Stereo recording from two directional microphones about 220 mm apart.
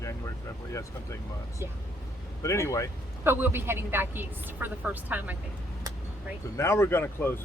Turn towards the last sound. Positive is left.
turn(degrees=10)  # may be behind; listen again after turning